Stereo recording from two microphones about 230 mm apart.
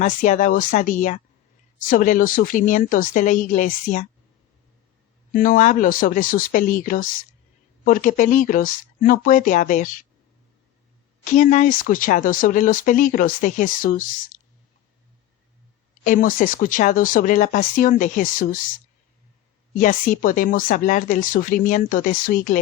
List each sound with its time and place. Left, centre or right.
0.0 s speech: left
5.3 s speech: left
11.3 s speech: left
16.0 s speech: left
19.8 s speech: left